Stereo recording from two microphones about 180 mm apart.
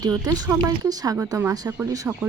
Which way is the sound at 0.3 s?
20° right (ahead or behind).